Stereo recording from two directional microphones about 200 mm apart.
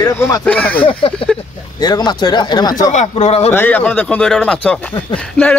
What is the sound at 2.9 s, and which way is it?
Speech, 35° left (ahead or behind).